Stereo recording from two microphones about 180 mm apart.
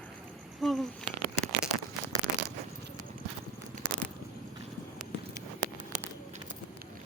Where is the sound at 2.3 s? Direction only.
75° right (ahead or behind).